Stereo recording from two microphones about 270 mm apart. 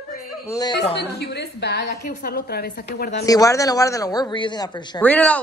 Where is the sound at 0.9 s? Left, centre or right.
Left.